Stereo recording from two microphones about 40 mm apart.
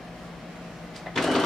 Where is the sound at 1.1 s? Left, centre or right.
Centre.